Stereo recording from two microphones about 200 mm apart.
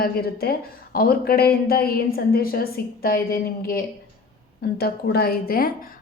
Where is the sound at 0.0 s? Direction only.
50° left (ahead or behind).